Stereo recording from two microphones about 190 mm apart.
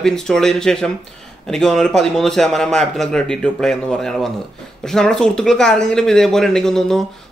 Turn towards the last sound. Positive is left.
turn(degrees=0)  # may be behind; listen again after turning